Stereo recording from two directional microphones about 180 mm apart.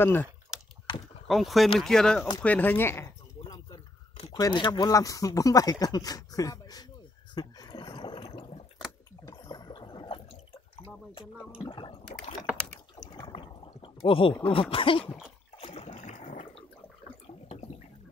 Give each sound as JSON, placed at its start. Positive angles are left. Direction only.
{"t": 0.0, "sound": "speech", "side_deg": 10}
{"t": 1.2, "sound": "speech", "side_deg": 0}
{"t": 2.4, "sound": "a sound", "side_deg": 10}
{"t": 4.4, "sound": "speech", "side_deg": 25}
{"t": 7.3, "sound": "a sound", "side_deg": 20}
{"t": 11.6, "sound": "speech", "side_deg": 30}
{"t": 13.1, "sound": "rowboat", "side_deg": 25}
{"t": 14.5, "sound": "speech", "side_deg": 30}
{"t": 15.6, "sound": "a sound", "side_deg": 30}